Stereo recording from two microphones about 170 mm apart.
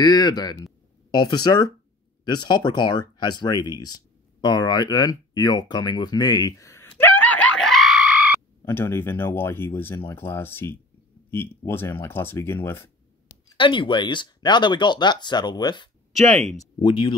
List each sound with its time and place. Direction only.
0.0 s speech: 25° left (ahead or behind)
4.4 s a sound: 25° left (ahead or behind); by 8.4 s 5° right (ahead or behind)
8.6 s speech: 15° left (ahead or behind)
13.6 s speech: 30° left (ahead or behind)